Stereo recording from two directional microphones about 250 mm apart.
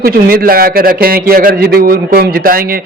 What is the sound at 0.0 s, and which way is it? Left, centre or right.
A man's voice, right.